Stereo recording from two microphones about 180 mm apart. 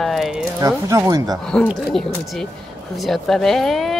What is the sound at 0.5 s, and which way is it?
Speech, 20° right (ahead or behind).